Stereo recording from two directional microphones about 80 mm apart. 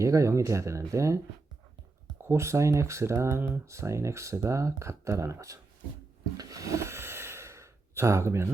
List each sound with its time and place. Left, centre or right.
0.0 s speech: right
2.2 s speech: right
6.3 s snort: right